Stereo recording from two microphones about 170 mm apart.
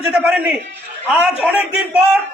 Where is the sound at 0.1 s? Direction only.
10° right (ahead or behind).